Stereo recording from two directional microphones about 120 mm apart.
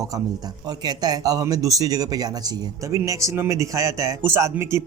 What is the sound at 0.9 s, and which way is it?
Speech, 35° right (ahead or behind).